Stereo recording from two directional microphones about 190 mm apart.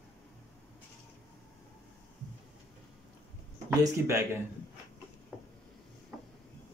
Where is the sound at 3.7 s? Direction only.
15° right (ahead or behind).